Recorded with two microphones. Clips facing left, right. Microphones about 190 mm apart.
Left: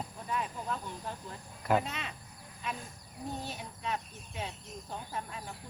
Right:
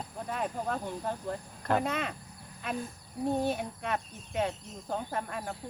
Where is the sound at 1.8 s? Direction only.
55° right (ahead or behind).